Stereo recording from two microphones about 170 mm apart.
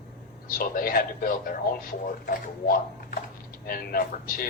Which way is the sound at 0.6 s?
60° left (ahead or behind).